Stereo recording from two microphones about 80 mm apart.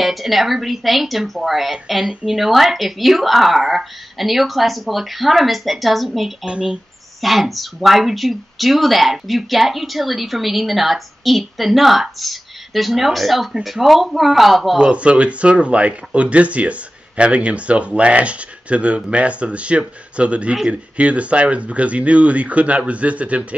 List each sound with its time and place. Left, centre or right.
0.0 s speech: centre
6.4 s speech: centre
7.2 s speech: centre
14.8 s speech: centre